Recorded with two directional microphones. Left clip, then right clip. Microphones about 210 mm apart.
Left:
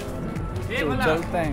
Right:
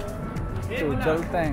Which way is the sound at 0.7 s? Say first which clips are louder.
Left 2 dB; 20° left (ahead or behind).